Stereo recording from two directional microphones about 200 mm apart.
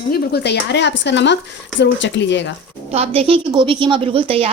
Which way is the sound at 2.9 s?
30° right (ahead or behind).